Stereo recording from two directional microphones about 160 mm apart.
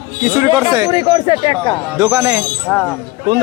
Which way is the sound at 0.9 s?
35° left (ahead or behind).